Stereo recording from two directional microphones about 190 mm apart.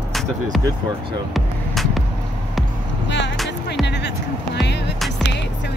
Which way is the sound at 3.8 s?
65° left (ahead or behind).